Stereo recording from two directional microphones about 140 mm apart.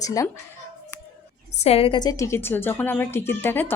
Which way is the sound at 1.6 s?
45° left (ahead or behind).